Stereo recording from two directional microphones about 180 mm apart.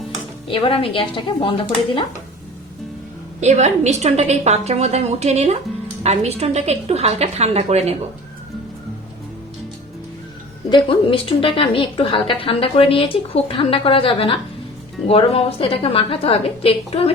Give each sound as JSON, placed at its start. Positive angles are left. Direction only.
{"t": 0.4, "sound": "a woman's voice", "side_deg": 30}
{"t": 3.4, "sound": "a woman's voice", "side_deg": -40}
{"t": 10.7, "sound": "a woman's voice", "side_deg": 30}